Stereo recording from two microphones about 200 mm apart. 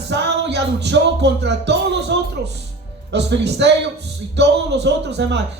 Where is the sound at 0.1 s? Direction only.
60° right (ahead or behind).